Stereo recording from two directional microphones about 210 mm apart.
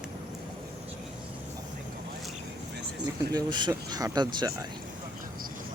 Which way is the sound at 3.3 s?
20° right (ahead or behind).